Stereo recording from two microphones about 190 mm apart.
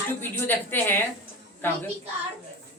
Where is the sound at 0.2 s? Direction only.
10° left (ahead or behind).